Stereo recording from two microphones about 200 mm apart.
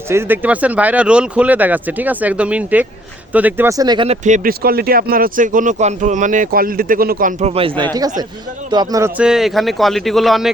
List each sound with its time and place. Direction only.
0.1 s speech: 10° right (ahead or behind); by 7.7 s 30° right (ahead or behind)
8.7 s a man's voice: 20° right (ahead or behind); by 10.5 s centre (ahead or behind)